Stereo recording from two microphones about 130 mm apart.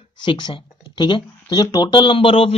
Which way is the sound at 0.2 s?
35° left (ahead or behind).